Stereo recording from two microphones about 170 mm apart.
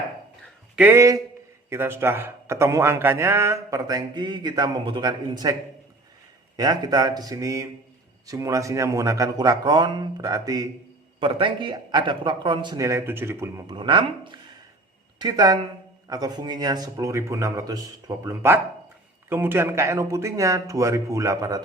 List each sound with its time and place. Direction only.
0.8 s a man's voice: 15° right (ahead or behind)
6.6 s speech: 25° right (ahead or behind)
13.7 s a man's voice: 30° right (ahead or behind)